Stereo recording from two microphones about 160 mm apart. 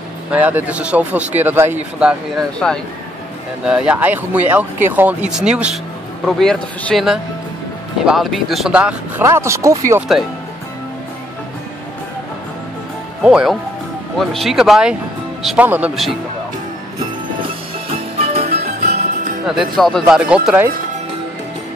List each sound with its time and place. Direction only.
0.3 s speech: 10° right (ahead or behind)
2.6 s speech: centre (ahead or behind)
9.2 s speech: 15° right (ahead or behind)
13.2 s speech: 5° right (ahead or behind)
17.4 s music: 35° right (ahead or behind)
19.4 s speech: centre (ahead or behind)